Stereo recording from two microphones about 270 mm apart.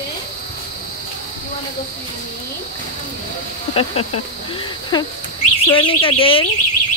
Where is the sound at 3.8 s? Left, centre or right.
Left.